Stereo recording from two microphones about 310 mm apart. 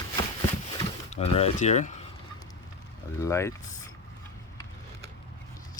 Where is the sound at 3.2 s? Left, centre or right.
Centre.